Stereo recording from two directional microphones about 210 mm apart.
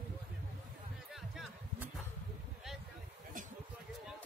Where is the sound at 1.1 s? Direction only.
Centre (ahead or behind).